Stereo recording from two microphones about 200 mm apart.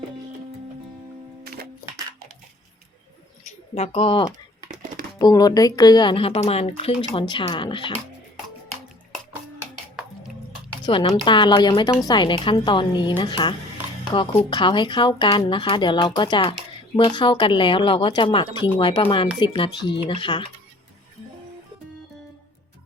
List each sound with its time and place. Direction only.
3.8 s speech: 30° left (ahead or behind)
10.8 s speech: 25° left (ahead or behind)